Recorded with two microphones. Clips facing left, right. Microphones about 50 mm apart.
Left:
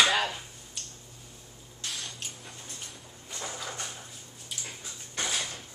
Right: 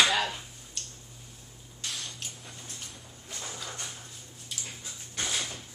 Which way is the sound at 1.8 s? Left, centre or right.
Centre.